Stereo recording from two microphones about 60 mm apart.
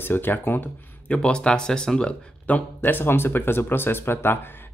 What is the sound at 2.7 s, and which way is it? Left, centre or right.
Speech, left.